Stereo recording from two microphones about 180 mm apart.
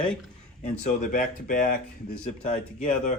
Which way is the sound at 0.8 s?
45° left (ahead or behind).